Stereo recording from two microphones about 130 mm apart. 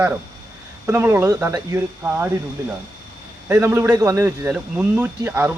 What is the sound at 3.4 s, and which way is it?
A man's voice, 20° right (ahead or behind).